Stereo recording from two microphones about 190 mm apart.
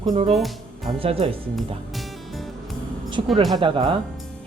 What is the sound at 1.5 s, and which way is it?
Music, centre (ahead or behind).